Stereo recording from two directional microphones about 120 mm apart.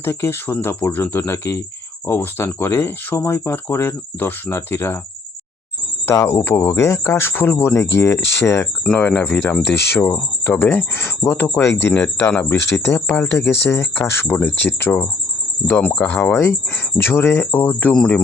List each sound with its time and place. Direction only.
0.0 s speech: 20° left (ahead or behind)
6.1 s speech: 25° left (ahead or behind)
8.8 s speech: 10° left (ahead or behind)
12.7 s speech: 25° left (ahead or behind)